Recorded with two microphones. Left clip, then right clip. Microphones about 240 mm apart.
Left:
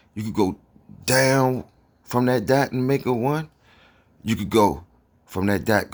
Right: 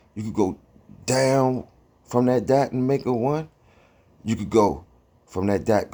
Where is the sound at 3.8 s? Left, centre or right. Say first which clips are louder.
Left 2 dB; left.